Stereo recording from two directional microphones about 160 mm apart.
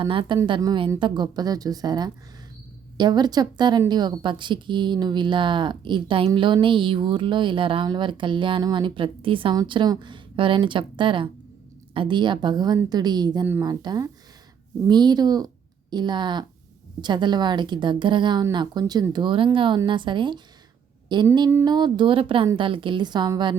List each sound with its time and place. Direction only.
0.0 s a woman's voice: 35° right (ahead or behind)